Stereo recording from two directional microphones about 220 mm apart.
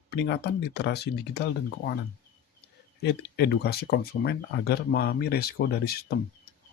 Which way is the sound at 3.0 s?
45° left (ahead or behind).